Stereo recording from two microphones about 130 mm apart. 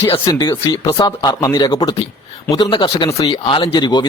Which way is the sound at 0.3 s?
35° left (ahead or behind).